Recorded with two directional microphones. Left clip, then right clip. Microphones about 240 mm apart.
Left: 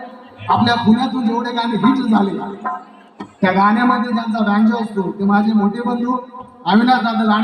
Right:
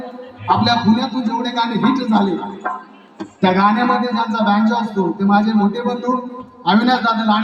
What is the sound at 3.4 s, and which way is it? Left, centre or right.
A man's voice, right.